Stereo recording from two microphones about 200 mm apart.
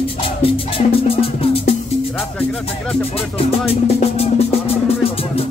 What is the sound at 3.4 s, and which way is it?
Speech, 30° left (ahead or behind).